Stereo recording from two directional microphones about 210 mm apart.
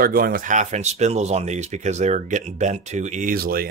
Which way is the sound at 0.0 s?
45° right (ahead or behind).